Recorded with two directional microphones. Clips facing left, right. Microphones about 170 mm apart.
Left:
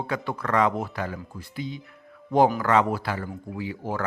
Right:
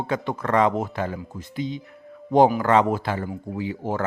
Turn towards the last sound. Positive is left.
turn(degrees=-20)  # may be behind; listen again after turning